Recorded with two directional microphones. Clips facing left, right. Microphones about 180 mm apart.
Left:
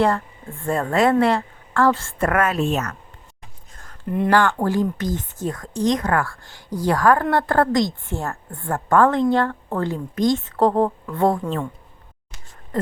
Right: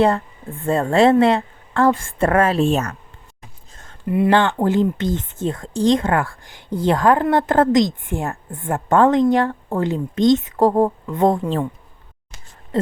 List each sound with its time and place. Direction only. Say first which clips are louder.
0.0 s a woman's voice: right 3 dB; 20° right (ahead or behind)
2.1 s speech: right 4 dB; 30° right (ahead or behind)
4.0 s speech: right 4 dB; 5° right (ahead or behind)
4.3 s a woman's voice: right 1 dB; 20° right (ahead or behind)
12.7 s speech: right 3 dB; 25° right (ahead or behind)